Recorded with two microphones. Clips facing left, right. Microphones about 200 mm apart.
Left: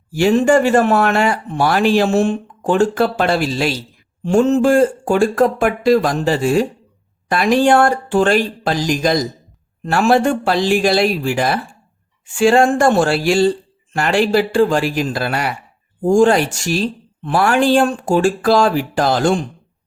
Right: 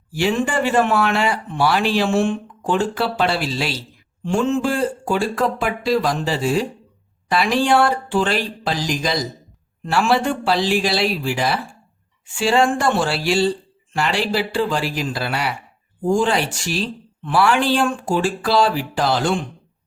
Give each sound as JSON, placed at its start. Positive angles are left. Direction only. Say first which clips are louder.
{"t": 0.1, "sound": "speech", "louder": "left 8 dB", "side_deg": 45}